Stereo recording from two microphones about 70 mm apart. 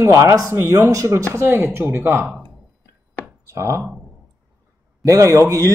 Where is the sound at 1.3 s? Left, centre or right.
Right.